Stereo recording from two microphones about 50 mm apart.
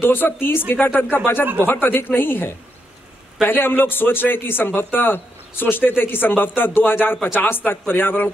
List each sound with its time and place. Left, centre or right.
0.0 s a man's voice: left